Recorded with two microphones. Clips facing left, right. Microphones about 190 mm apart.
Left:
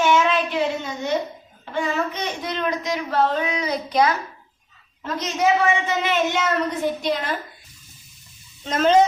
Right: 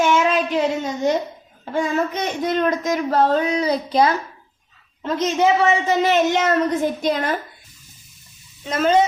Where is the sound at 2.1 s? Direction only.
45° right (ahead or behind); by 5.4 s 30° right (ahead or behind).